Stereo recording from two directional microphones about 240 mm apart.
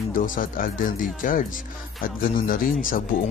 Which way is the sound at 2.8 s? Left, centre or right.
Left.